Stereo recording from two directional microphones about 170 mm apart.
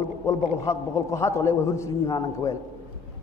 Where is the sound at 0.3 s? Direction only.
20° left (ahead or behind).